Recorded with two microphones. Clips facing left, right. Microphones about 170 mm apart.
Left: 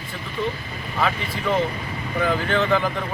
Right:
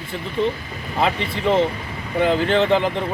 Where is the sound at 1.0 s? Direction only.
25° right (ahead or behind).